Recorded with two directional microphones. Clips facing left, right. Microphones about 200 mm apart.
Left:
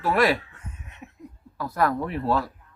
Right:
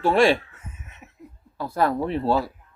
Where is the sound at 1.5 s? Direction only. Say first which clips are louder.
Right 2 dB; 25° right (ahead or behind).